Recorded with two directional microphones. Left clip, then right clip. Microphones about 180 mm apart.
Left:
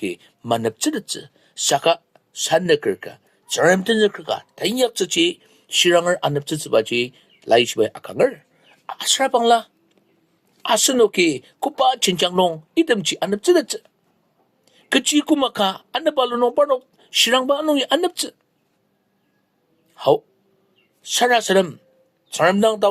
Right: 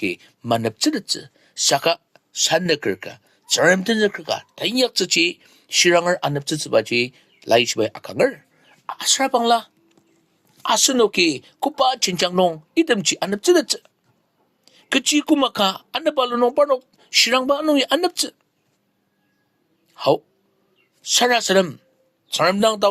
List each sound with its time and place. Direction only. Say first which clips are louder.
0.0 s a woman's voice: right 2 dB; 30° right (ahead or behind)
19.9 s a woman's voice: left 1 dB; 30° right (ahead or behind)